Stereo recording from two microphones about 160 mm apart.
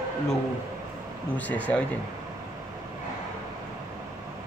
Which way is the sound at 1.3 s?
10° left (ahead or behind).